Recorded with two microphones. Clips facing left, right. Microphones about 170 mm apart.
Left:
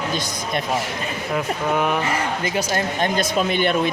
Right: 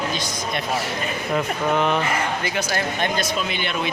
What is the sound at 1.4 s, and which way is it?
Speech, 5° left (ahead or behind).